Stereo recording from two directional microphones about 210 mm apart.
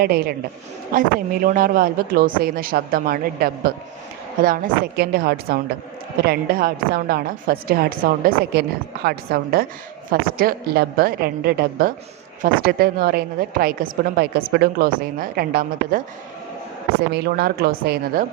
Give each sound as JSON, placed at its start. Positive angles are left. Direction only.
{"t": 0.0, "sound": "a woman's voice", "side_deg": -45}
{"t": 1.5, "sound": "a woman's voice", "side_deg": -45}
{"t": 17.1, "sound": "a woman's voice", "side_deg": -50}